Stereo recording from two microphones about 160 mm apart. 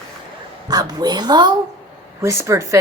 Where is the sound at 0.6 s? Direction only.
25° right (ahead or behind).